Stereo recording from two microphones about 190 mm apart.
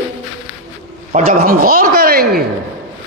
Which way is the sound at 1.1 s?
45° right (ahead or behind).